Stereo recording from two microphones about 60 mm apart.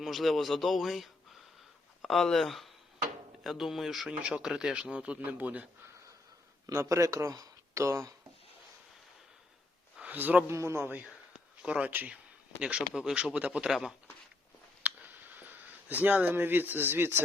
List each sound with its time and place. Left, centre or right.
0.0 s a man's voice: centre
4.2 s speech: centre
6.7 s speech: right
10.0 s a man's voice: right
10.4 s a man's voice: right
11.6 s speech: centre
14.8 s a sound: right